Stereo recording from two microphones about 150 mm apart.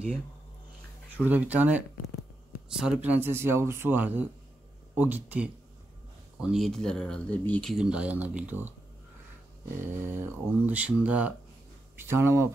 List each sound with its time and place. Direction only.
1.2 s speech: 10° right (ahead or behind); by 7.7 s 10° left (ahead or behind)
7.7 s speech: 5° right (ahead or behind)
9.8 s speech: 15° right (ahead or behind)